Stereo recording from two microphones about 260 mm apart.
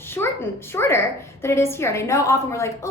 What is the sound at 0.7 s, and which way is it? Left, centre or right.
A woman's voice, centre.